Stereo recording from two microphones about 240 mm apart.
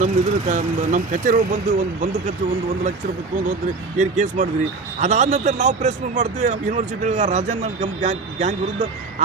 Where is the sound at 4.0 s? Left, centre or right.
Right.